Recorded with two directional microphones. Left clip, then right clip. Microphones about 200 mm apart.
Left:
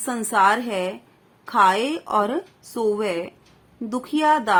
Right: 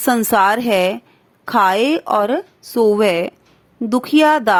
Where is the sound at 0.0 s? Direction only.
40° right (ahead or behind).